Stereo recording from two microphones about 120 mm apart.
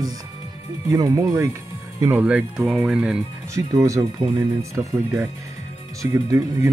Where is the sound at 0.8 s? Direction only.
30° right (ahead or behind); by 3.2 s 10° right (ahead or behind).